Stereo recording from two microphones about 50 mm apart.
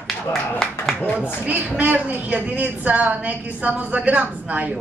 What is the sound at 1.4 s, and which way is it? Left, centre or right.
A woman's voice, right.